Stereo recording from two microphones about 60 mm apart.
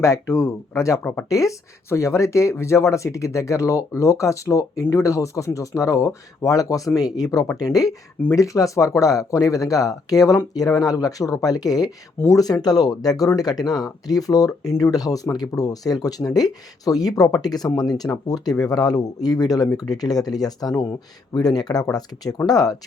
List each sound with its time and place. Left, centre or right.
0.0 s speech: left
1.3 s speech: left
1.9 s speech: left
8.3 s speech: left